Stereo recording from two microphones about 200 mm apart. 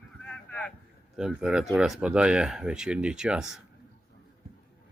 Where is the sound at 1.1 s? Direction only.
Centre (ahead or behind).